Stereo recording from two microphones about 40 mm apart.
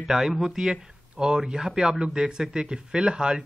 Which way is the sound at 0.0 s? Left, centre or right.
Centre.